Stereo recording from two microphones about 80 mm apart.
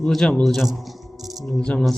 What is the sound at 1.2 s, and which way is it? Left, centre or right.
Music, centre.